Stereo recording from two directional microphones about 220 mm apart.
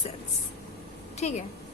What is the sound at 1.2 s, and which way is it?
Speech, 30° left (ahead or behind).